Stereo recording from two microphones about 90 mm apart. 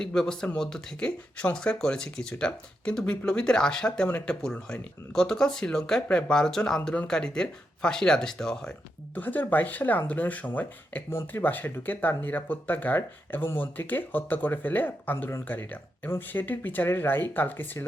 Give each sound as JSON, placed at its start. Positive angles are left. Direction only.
{"t": 0.0, "sound": "speech", "side_deg": 5}
{"t": 9.1, "sound": "speech", "side_deg": 20}